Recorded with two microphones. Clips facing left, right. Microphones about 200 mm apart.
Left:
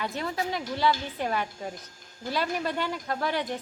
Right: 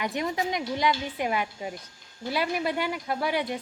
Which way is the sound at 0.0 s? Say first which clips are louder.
Right 2 dB; 15° right (ahead or behind).